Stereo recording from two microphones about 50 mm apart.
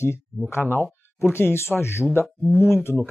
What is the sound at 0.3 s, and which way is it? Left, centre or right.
Speech, centre.